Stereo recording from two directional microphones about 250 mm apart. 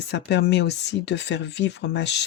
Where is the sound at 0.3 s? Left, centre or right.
Left.